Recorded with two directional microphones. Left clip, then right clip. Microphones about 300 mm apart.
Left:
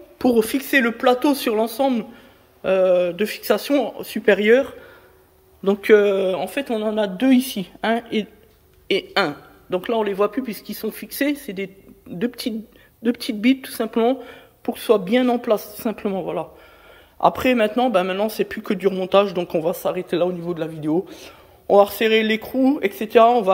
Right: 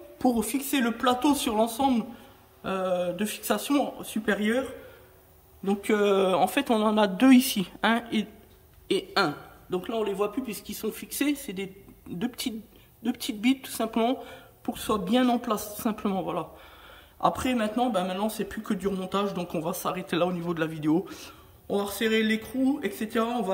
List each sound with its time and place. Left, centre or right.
0.2 s speech: centre
5.7 s a man's voice: centre